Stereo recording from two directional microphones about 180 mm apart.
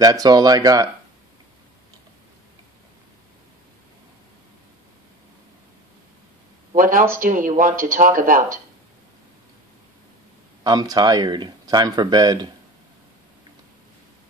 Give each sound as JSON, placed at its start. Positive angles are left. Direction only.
{"t": 0.0, "sound": "speech", "side_deg": -20}
{"t": 6.7, "sound": "speech", "side_deg": -50}
{"t": 10.6, "sound": "speech", "side_deg": -20}